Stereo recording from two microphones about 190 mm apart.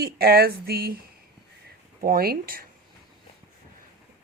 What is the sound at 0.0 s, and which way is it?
A woman's voice, 55° right (ahead or behind).